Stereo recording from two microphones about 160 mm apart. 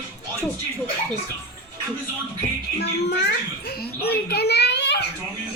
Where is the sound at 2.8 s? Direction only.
90° left.